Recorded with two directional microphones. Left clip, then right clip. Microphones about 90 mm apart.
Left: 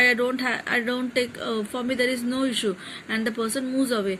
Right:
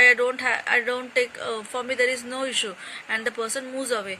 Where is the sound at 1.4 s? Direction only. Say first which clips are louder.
Left 1 dB; 15° right (ahead or behind).